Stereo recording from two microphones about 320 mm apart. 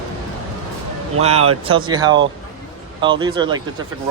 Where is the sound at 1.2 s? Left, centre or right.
Centre.